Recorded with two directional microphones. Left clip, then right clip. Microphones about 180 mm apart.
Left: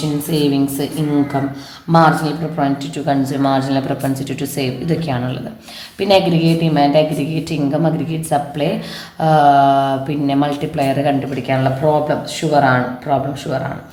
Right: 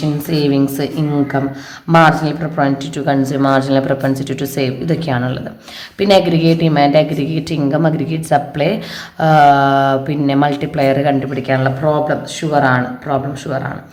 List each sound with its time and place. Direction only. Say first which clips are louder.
0.3 s speech: right 2 dB; 40° right (ahead or behind)
1.9 s speech: right 2 dB; 45° right (ahead or behind)
12.0 s speech: even; 20° right (ahead or behind)